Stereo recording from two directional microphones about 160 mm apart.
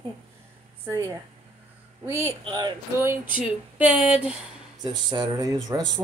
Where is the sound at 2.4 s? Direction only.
25° right (ahead or behind).